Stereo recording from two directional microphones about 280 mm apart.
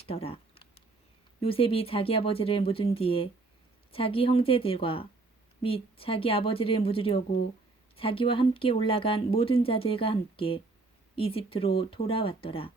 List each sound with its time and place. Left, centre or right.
0.0 s speech: centre